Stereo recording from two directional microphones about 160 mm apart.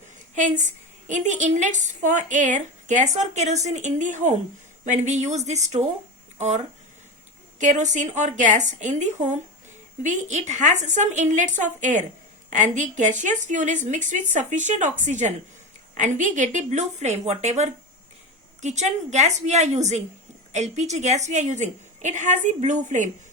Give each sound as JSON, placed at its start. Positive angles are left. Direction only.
{"t": 0.3, "sound": "a woman's voice", "side_deg": -50}
{"t": 7.6, "sound": "a woman's voice", "side_deg": -50}